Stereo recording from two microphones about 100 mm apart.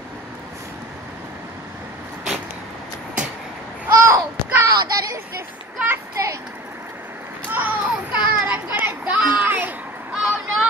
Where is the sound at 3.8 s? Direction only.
25° right (ahead or behind).